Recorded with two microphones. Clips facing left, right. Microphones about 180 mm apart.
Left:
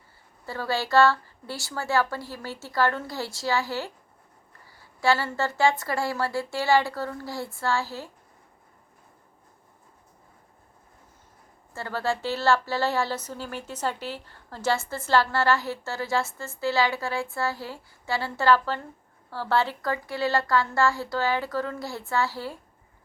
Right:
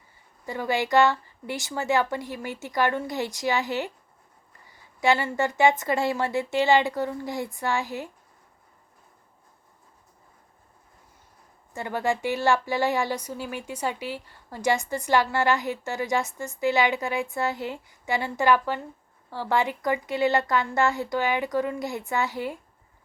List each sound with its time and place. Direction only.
0.4 s a woman's voice: 15° right (ahead or behind)
11.7 s a woman's voice: 15° right (ahead or behind)